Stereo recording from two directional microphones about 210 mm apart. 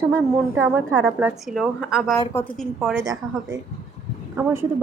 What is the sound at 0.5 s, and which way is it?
A woman's voice, 15° right (ahead or behind).